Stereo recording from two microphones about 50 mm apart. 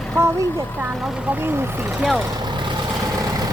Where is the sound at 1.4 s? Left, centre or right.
Right.